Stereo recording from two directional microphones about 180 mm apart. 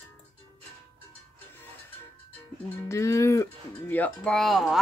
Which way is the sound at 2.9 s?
15° left (ahead or behind).